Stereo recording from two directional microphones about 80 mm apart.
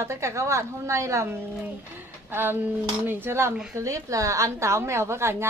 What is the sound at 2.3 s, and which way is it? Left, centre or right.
Speech, right.